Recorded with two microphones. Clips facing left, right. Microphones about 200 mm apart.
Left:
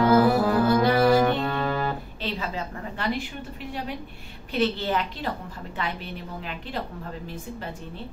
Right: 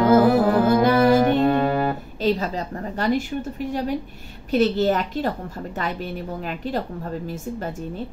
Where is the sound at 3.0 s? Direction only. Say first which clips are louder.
Right 7 dB; 45° right (ahead or behind).